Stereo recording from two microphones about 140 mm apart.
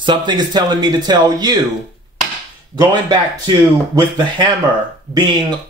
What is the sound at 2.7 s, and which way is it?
Speech, 30° right (ahead or behind).